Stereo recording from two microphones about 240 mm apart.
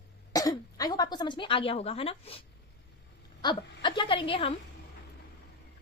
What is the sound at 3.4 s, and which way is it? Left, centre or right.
A woman's voice, centre.